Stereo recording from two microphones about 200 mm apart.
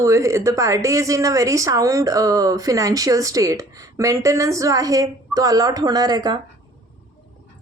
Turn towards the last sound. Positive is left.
turn(degrees=-20)  # may be behind; listen again after turning